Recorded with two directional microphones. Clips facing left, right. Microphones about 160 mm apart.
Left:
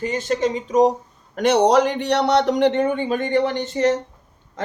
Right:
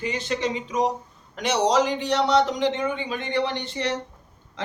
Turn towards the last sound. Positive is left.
turn(degrees=45)  # may be behind; listen again after turning